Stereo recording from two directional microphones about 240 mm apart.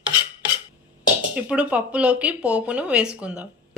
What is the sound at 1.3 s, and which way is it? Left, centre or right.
Speech, centre.